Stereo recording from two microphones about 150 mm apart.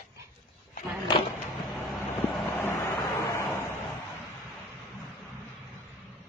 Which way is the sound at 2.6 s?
15° left (ahead or behind).